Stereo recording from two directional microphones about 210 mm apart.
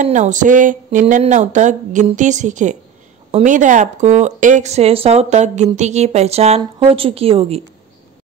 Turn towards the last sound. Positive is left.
turn(degrees=-25)  # may be behind; listen again after turning